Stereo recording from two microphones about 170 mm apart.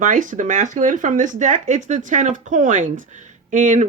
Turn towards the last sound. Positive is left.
turn(degrees=-50)  # may be behind; listen again after turning